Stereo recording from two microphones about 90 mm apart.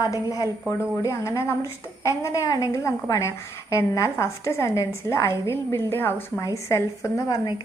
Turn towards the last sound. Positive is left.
turn(degrees=35)  # may be behind; listen again after turning